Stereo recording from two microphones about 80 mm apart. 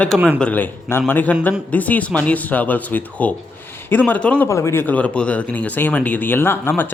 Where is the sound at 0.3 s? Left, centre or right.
Centre.